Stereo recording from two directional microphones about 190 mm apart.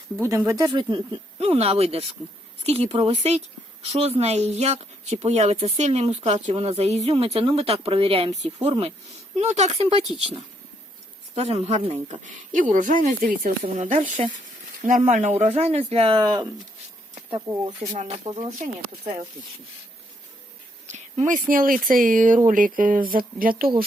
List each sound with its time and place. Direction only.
0.2 s speech: 15° right (ahead or behind)
0.8 s speech: 25° right (ahead or behind)
17.9 s speech: 40° right (ahead or behind)
18.3 s speech: 25° right (ahead or behind)
20.8 s speech: 40° right (ahead or behind)